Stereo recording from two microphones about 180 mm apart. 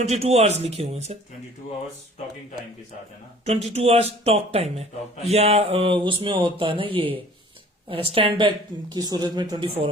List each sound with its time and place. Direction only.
0.0 s speech: 35° right (ahead or behind)
3.7 s a woman's voice: 35° right (ahead or behind)